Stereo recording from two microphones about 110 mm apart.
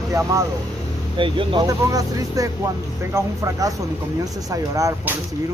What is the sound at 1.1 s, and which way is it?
Speech, 50° right (ahead or behind).